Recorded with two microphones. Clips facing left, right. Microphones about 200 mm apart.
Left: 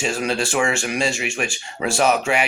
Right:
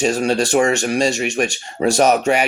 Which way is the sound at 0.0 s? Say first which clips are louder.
Right 6 dB; 40° right (ahead or behind).